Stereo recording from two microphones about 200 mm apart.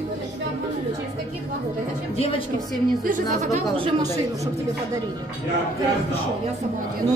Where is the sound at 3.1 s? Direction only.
40° right (ahead or behind).